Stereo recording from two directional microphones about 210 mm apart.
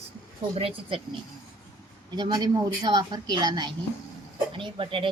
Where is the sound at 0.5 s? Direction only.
25° right (ahead or behind).